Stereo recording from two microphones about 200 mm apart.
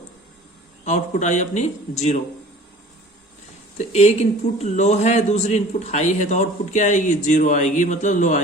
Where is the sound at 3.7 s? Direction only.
35° left (ahead or behind).